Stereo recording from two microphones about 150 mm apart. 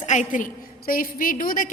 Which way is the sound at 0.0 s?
55° left (ahead or behind).